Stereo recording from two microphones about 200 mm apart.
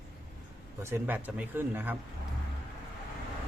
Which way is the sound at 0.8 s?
10° right (ahead or behind).